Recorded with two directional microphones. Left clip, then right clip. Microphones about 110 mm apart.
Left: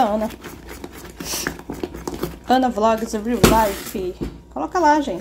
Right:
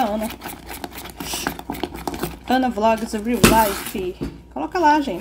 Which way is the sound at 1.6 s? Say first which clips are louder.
Right 2 dB; 5° right (ahead or behind).